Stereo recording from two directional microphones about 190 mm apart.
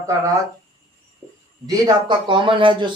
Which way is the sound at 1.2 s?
15° right (ahead or behind).